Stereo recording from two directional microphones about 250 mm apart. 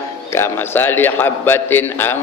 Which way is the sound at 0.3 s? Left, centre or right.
Centre.